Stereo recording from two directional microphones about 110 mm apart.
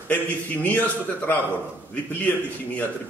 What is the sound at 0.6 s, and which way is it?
A man's voice, 15° left (ahead or behind).